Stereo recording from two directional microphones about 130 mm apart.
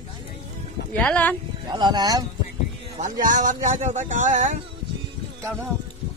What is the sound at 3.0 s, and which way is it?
Speech, 75° right (ahead or behind).